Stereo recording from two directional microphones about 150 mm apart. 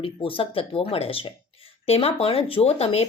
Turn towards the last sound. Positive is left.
turn(degrees=45)  # may be behind; listen again after turning